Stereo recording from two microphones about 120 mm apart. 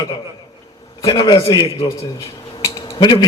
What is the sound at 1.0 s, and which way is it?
Speech, 30° left (ahead or behind).